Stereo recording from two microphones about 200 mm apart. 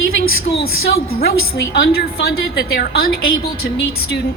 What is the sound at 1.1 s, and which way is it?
A woman's voice, 50° left (ahead or behind).